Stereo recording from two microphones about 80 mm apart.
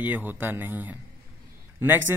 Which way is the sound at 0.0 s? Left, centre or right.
Right.